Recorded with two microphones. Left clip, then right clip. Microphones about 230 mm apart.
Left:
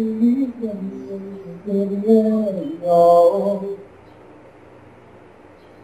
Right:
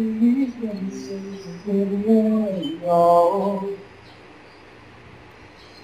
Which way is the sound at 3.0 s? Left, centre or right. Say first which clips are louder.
Left 3 dB; centre.